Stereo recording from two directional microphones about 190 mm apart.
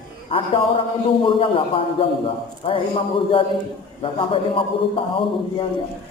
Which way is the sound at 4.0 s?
30° left (ahead or behind).